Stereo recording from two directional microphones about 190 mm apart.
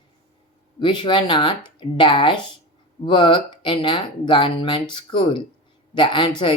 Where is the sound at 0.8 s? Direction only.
25° left (ahead or behind).